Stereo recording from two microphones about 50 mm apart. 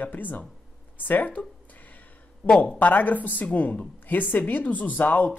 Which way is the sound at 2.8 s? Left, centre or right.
Left.